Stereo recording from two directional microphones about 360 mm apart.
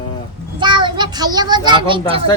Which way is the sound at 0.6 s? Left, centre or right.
Centre.